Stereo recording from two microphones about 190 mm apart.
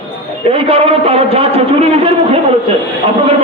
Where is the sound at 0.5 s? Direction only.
30° right (ahead or behind).